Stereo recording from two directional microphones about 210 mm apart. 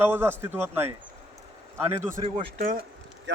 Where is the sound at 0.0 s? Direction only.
10° right (ahead or behind).